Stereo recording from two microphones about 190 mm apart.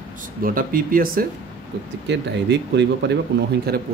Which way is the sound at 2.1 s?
65° right (ahead or behind).